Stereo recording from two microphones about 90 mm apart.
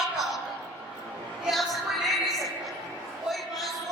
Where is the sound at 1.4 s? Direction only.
Centre (ahead or behind).